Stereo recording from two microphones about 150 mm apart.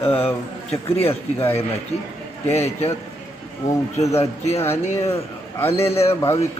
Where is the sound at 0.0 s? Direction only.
15° left (ahead or behind).